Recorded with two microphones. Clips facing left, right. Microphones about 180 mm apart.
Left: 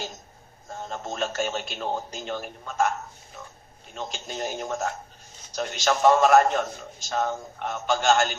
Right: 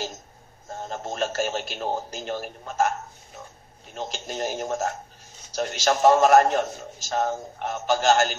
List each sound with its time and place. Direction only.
0.7 s a man's voice: 40° right (ahead or behind)